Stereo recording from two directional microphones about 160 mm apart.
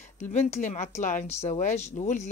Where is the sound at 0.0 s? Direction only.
45° left (ahead or behind).